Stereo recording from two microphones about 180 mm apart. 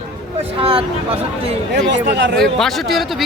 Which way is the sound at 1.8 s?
80° right.